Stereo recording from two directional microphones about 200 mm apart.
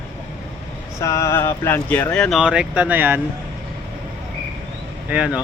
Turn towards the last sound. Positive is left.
turn(degrees=-5)  # may be behind; listen again after turning